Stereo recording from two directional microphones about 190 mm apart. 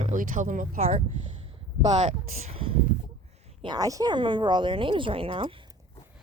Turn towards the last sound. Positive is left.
turn(degrees=-30)  # may be behind; listen again after turning